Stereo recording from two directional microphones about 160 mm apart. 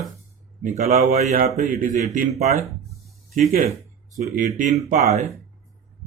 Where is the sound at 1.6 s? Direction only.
55° right (ahead or behind).